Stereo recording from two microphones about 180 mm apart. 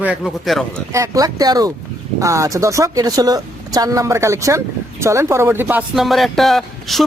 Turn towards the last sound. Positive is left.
turn(degrees=0)  # may be behind; listen again after turning